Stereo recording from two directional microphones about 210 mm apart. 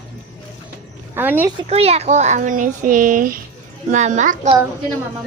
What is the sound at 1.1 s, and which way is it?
Speech, 10° right (ahead or behind).